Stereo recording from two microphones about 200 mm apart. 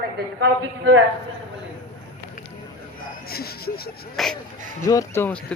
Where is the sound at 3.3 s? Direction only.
50° left (ahead or behind).